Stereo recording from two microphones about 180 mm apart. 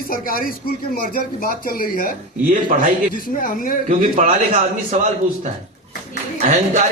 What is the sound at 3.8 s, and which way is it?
A man's voice, 45° right (ahead or behind).